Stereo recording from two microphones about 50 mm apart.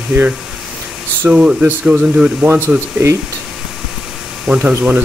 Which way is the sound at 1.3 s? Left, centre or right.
Centre.